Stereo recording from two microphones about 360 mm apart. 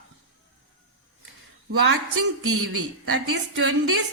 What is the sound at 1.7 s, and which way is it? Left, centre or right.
Speech, right.